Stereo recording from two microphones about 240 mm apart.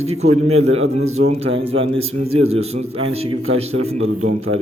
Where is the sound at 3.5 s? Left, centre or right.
Right.